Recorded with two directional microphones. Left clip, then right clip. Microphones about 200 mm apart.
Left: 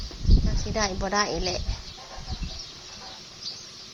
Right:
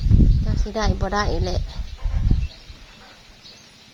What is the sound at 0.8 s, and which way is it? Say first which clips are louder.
Speech: right 2 dB; 25° right (ahead or behind).